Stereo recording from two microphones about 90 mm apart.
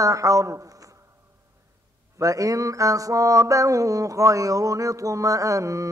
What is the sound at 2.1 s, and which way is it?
Mantra, 40° right (ahead or behind).